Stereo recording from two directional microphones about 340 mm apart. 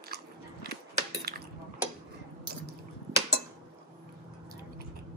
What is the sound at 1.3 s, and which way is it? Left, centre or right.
Cutlery, right.